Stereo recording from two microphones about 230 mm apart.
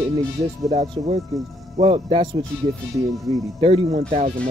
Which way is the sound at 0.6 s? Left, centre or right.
Right.